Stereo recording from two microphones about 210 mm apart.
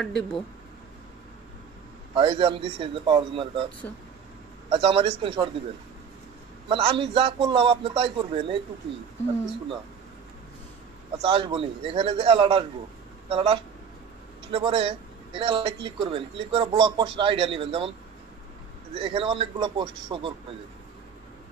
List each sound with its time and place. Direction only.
0.0 s speech: centre (ahead or behind)
2.1 s speech: 25° right (ahead or behind)
4.6 s speech: 25° right (ahead or behind)
6.7 s speech: 25° right (ahead or behind)
11.1 s speech: 25° right (ahead or behind)
18.9 s speech: 25° right (ahead or behind)